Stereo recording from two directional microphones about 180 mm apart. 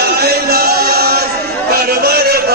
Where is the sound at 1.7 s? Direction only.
60° right (ahead or behind).